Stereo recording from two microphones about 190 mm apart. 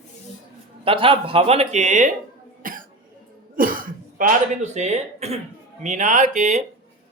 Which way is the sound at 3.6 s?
45° right (ahead or behind).